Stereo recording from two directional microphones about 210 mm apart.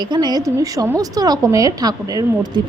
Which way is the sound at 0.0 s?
20° right (ahead or behind).